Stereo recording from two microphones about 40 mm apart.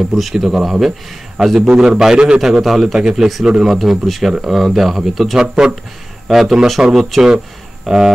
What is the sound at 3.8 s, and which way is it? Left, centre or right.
Speech, centre.